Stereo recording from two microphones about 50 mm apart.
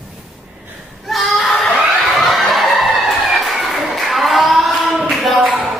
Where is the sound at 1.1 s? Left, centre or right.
Centre.